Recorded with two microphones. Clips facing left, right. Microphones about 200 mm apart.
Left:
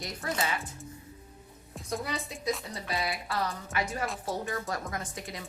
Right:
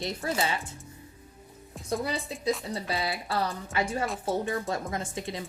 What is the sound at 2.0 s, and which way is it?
A woman's voice, 30° right (ahead or behind).